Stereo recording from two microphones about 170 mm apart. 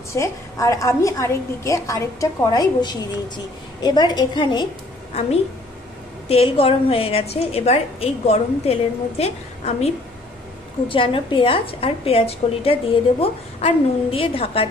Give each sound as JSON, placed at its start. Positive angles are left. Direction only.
{"t": 0.1, "sound": "a woman's voice", "side_deg": 20}
{"t": 6.2, "sound": "a woman's voice", "side_deg": 35}
{"t": 10.9, "sound": "a woman's voice", "side_deg": 30}